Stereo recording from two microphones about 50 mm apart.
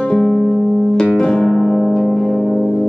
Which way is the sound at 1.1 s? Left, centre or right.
Centre.